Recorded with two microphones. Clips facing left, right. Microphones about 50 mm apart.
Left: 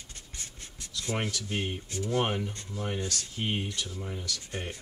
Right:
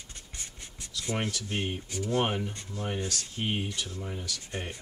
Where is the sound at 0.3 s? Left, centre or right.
Right.